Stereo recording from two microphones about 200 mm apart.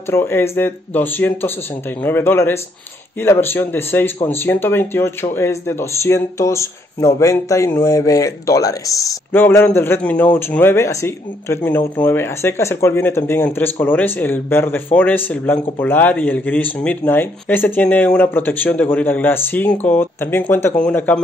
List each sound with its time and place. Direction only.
0.1 s speech: 10° left (ahead or behind)